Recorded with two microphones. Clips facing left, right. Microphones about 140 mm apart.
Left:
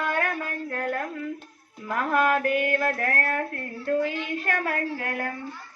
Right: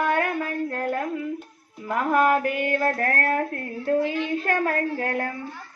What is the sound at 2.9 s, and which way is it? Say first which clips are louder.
Speech: right 3 dB; 40° right (ahead or behind).